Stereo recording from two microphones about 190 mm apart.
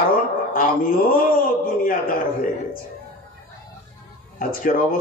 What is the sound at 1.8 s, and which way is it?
Speech, 45° left (ahead or behind).